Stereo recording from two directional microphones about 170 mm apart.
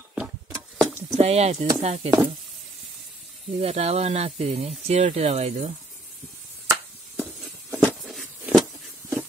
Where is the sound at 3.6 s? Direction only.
40° right (ahead or behind).